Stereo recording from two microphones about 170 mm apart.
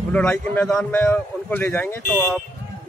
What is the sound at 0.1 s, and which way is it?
Speech, 10° left (ahead or behind).